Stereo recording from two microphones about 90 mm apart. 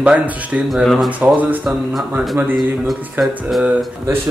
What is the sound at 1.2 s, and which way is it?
Speech, 15° right (ahead or behind).